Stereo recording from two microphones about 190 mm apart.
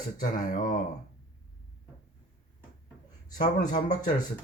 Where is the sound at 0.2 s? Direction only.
45° left (ahead or behind).